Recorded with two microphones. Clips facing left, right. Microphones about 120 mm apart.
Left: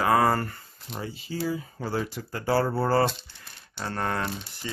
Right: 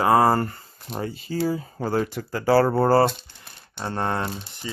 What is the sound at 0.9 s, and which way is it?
Speech, 50° right (ahead or behind).